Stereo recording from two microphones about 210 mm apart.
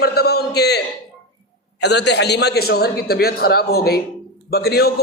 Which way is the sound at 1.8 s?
55° left (ahead or behind).